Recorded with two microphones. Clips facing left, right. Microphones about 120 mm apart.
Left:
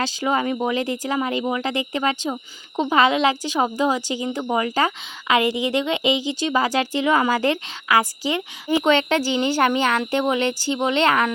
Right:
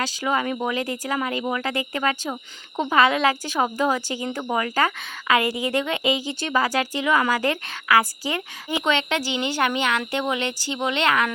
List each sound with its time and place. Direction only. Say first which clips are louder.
0.0 s a woman's voice: left 2 dB; 30° left (ahead or behind)
8.8 s speech: left 4 dB; 35° left (ahead or behind)